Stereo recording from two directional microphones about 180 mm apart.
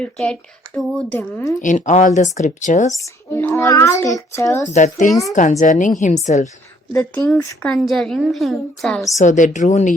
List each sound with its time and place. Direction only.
0.0 s a woman's voice: 5° left (ahead or behind)
1.6 s speech: 45° left (ahead or behind)
3.0 s a child's voice: 15° left (ahead or behind)
4.7 s a woman's voice: 45° left (ahead or behind)
6.9 s a woman's voice: 10° left (ahead or behind)
9.1 s speech: 45° left (ahead or behind)